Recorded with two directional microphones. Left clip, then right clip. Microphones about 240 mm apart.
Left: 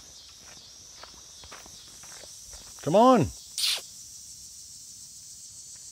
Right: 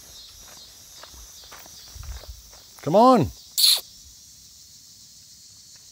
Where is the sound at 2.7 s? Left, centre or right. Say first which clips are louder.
Right 3 dB; centre.